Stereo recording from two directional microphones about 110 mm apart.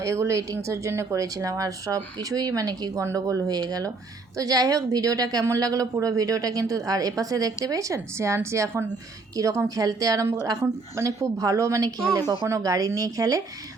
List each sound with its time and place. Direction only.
0.0 s a woman's voice: 25° right (ahead or behind)